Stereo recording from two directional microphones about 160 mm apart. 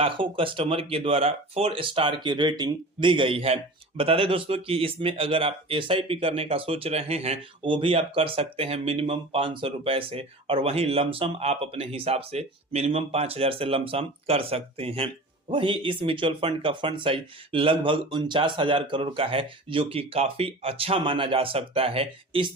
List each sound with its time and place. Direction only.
0.0 s speech: 35° right (ahead or behind)